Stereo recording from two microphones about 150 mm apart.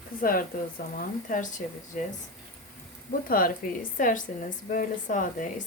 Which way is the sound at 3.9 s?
60° left (ahead or behind).